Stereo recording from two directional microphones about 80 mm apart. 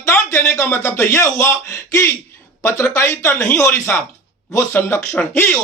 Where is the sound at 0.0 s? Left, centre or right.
Left.